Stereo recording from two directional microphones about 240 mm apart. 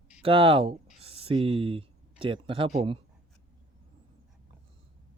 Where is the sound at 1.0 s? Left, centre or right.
Right.